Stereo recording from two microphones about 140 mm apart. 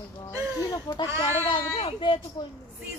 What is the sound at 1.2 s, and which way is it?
Speech, 45° left (ahead or behind).